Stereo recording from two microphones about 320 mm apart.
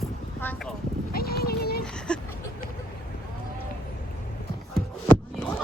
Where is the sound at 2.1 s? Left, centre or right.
Centre.